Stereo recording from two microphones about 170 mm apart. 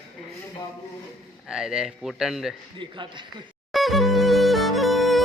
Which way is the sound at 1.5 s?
5° right (ahead or behind).